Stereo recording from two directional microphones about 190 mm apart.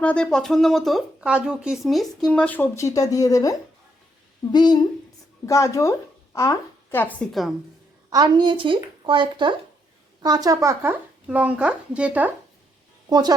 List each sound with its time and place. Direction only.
0.0 s speech: 5° left (ahead or behind)
8.1 s speech: 25° right (ahead or behind); by 12.3 s 5° right (ahead or behind)
13.1 s a woman's voice: 20° right (ahead or behind)